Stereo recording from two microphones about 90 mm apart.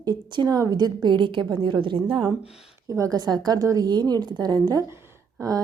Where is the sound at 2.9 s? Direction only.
35° right (ahead or behind).